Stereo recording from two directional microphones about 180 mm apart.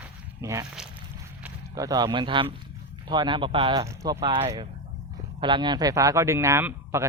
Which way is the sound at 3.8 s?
20° right (ahead or behind).